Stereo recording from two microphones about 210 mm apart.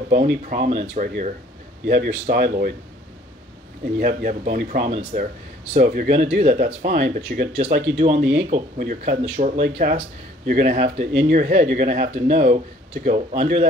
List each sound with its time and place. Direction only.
0.1 s speech: 40° right (ahead or behind)
4.0 s speech: 40° right (ahead or behind)
6.2 s speech: 30° right (ahead or behind)